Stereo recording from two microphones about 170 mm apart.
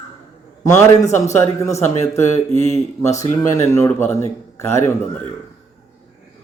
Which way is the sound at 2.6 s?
40° right (ahead or behind).